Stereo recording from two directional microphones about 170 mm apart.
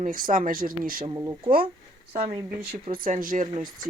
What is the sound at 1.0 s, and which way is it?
Speech, 20° right (ahead or behind).